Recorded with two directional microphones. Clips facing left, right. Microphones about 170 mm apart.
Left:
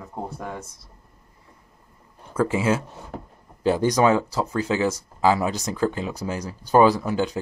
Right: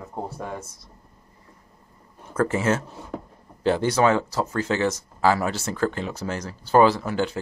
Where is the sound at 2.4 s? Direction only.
10° left (ahead or behind).